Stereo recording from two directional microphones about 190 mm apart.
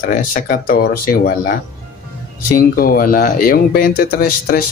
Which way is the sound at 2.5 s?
50° left (ahead or behind).